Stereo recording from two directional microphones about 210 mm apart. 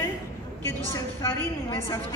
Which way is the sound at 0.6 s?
10° left (ahead or behind).